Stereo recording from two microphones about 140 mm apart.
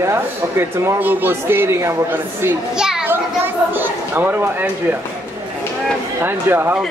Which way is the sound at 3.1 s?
15° right (ahead or behind).